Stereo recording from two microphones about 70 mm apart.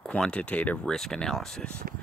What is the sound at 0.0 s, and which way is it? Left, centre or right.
Speech, centre.